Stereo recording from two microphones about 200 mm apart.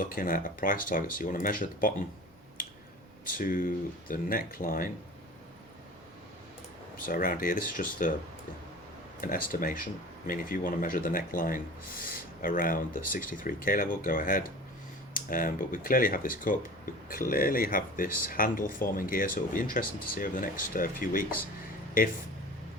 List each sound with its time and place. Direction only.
0.0 s speech: 45° left (ahead or behind)
2.6 s a sound: 45° left (ahead or behind)
3.2 s speech: 45° left (ahead or behind)
6.9 s speech: 45° left (ahead or behind)
9.2 s speech: 45° left (ahead or behind)